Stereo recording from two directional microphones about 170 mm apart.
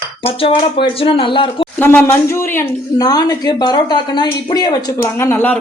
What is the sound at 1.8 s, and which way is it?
Speech, 10° left (ahead or behind).